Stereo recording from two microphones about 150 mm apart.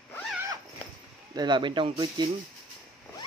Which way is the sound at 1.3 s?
30° right (ahead or behind).